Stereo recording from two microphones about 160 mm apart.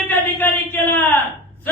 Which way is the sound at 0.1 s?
10° left (ahead or behind).